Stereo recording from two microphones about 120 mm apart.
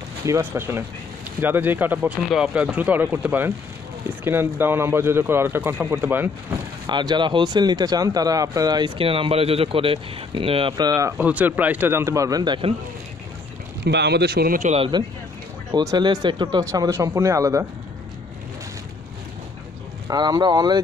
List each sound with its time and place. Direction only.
0.3 s speech: 20° right (ahead or behind)
2.2 s speech: 5° right (ahead or behind)
6.9 s speech: 40° right (ahead or behind)
10.8 s speech: 30° right (ahead or behind)
11.1 s speech: 10° right (ahead or behind); by 12.5 s 30° right (ahead or behind)
14.8 s speech: 40° right (ahead or behind)
20.1 s speech: 35° right (ahead or behind)